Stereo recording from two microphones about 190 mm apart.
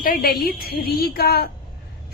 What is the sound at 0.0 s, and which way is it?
A woman's voice, 50° left (ahead or behind).